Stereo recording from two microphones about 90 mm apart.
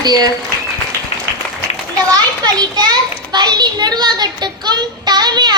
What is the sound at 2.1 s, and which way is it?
A child's voice, 50° right (ahead or behind).